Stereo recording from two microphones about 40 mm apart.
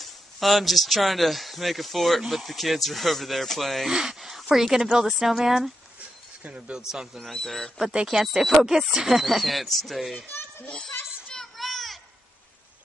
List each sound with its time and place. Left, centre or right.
0.0 s speech: centre
3.9 s speech: centre
4.2 s a sound: centre
5.2 s speech: centre
6.4 s speech: right
6.8 s speech: centre
7.4 s speech: centre
7.9 s speech: right
8.2 s speech: centre
11.5 s a sound: centre